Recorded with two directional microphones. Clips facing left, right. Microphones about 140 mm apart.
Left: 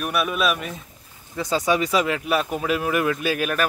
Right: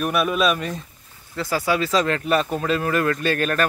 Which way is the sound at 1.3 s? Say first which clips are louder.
Left 1 dB; 20° left (ahead or behind).